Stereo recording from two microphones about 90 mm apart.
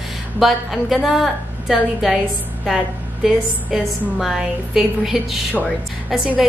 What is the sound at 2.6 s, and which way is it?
Music, 5° right (ahead or behind).